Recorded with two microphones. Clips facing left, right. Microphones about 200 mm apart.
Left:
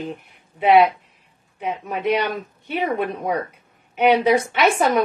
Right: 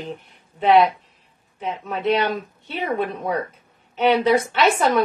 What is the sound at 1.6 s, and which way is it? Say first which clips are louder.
A woman's voice: left 1 dB; 10° left (ahead or behind).